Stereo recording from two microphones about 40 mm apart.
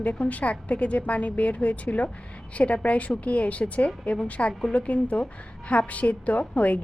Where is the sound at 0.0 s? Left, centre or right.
Left.